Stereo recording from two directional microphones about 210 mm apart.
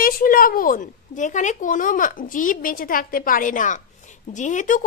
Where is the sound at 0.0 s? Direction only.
40° left (ahead or behind).